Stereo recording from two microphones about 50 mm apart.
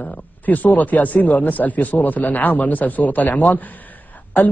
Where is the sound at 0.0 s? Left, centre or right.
Left.